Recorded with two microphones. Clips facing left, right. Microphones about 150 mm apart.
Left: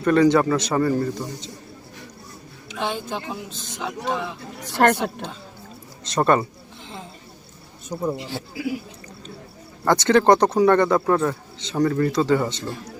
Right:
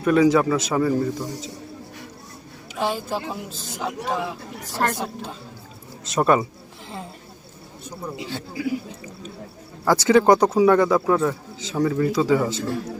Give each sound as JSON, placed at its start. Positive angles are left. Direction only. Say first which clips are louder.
{"t": 0.0, "sound": "speech", "louder": "even", "side_deg": -5}
{"t": 2.7, "sound": "speech", "louder": "right 2 dB", "side_deg": -5}
{"t": 4.6, "sound": "a woman's voice", "louder": "left 6 dB", "side_deg": 70}
{"t": 6.1, "sound": "speech", "louder": "even", "side_deg": -5}
{"t": 9.8, "sound": "speech", "louder": "even", "side_deg": -5}